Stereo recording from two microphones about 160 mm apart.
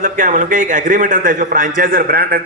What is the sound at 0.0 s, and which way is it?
A man's voice, 55° right (ahead or behind).